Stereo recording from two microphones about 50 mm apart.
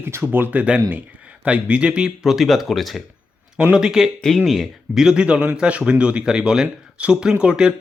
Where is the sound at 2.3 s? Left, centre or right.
Centre.